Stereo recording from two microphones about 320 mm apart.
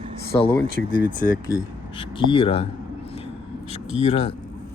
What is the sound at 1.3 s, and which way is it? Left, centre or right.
Speech, centre.